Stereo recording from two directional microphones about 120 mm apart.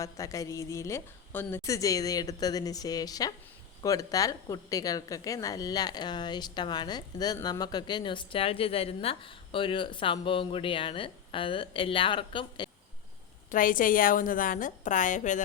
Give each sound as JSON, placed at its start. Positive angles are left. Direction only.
{"t": 0.0, "sound": "a woman's voice", "side_deg": 30}
{"t": 13.5, "sound": "a woman's voice", "side_deg": 90}